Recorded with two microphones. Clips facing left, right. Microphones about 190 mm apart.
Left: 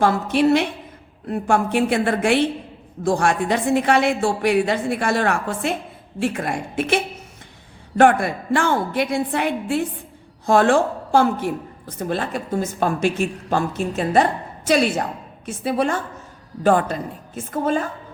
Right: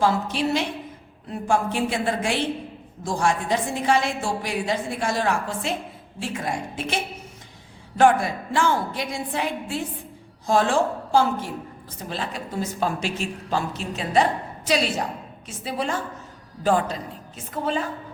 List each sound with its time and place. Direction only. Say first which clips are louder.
0.0 s a woman's voice: left 5 dB; 60° left (ahead or behind)